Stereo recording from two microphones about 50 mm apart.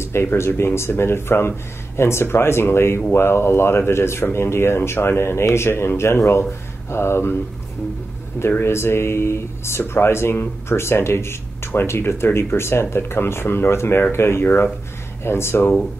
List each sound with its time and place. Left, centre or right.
0.0 s speech: left
8.4 s speech: left